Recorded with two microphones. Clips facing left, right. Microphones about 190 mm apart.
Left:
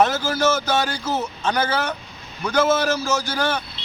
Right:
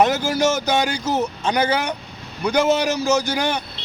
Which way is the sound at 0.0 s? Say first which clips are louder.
Right 2 dB; 15° right (ahead or behind).